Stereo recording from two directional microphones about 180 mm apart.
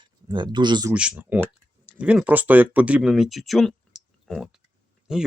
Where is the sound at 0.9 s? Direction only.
5° right (ahead or behind).